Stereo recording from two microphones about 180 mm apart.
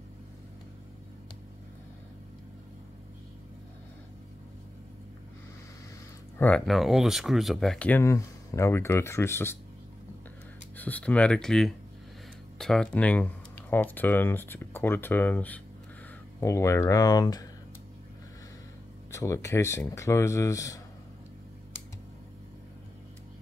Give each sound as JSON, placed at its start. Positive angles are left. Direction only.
{"t": 6.3, "sound": "speech", "side_deg": 10}
{"t": 10.8, "sound": "speech", "side_deg": 10}
{"t": 19.1, "sound": "speech", "side_deg": 15}